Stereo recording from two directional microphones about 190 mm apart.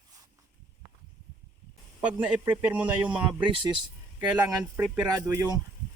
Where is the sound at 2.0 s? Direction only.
5° right (ahead or behind).